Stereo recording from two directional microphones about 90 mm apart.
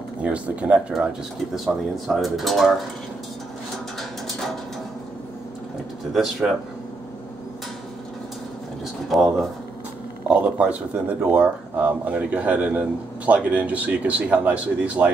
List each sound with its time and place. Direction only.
0.2 s speech: 15° right (ahead or behind)
6.1 s speech: centre (ahead or behind)
9.1 s speech: centre (ahead or behind)
10.4 s speech: 15° right (ahead or behind)